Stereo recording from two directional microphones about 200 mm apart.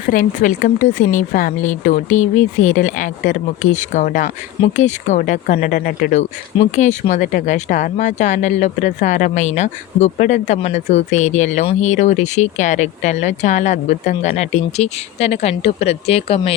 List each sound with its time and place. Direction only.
0.1 s speech: 40° left (ahead or behind)